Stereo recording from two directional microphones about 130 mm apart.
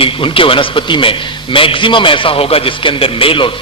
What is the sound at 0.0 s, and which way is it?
A man's voice, 40° left (ahead or behind).